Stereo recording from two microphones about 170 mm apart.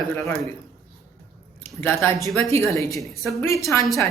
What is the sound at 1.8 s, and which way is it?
Speech, 15° left (ahead or behind).